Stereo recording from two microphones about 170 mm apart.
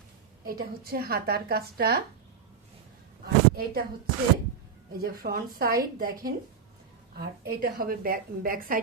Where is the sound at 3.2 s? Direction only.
60° right (ahead or behind).